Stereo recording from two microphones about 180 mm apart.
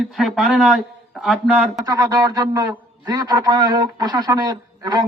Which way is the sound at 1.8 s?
20° right (ahead or behind).